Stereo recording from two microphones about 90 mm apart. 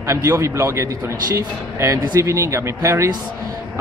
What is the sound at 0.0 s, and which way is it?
A man's voice, 35° right (ahead or behind).